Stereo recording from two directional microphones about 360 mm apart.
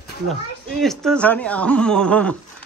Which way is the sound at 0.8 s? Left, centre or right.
Centre.